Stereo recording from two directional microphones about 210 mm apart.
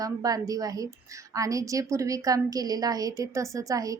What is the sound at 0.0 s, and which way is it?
A woman's voice, 15° right (ahead or behind).